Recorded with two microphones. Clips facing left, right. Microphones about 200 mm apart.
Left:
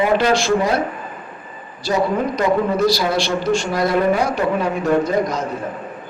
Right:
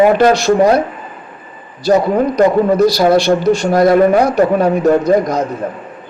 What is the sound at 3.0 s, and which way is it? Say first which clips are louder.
A man's voice: right 9 dB; 45° right (ahead or behind).